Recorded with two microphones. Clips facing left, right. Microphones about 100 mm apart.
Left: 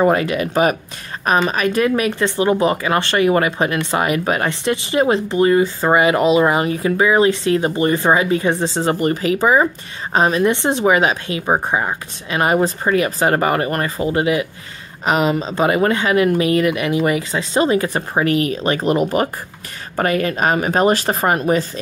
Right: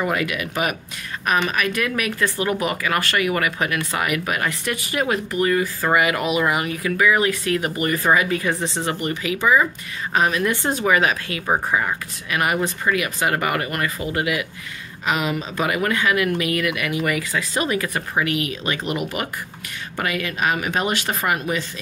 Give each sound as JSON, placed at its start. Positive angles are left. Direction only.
{"t": 0.0, "sound": "speech", "side_deg": 35}